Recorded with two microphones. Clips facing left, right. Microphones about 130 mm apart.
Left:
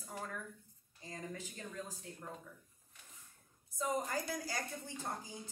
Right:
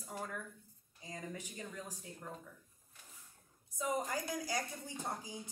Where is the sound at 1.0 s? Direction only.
15° right (ahead or behind).